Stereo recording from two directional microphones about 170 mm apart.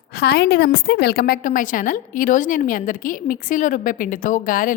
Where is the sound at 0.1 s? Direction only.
75° left (ahead or behind).